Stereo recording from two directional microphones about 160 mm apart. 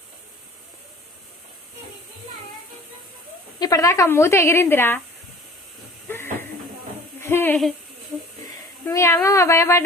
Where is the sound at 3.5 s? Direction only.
20° left (ahead or behind).